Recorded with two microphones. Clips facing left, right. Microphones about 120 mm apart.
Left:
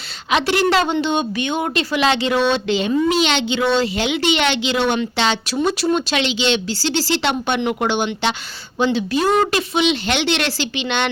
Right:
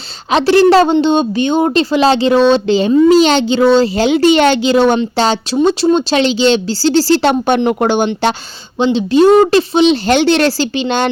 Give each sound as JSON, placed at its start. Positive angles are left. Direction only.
{"t": 0.3, "sound": "speech", "side_deg": -35}
{"t": 8.8, "sound": "speech", "side_deg": -25}